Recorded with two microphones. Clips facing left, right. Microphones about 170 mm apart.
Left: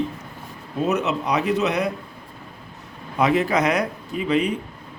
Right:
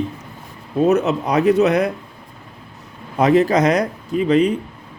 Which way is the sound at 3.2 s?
40° right (ahead or behind).